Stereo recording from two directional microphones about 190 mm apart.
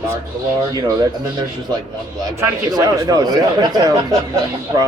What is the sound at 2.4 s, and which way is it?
A man's voice, 20° right (ahead or behind).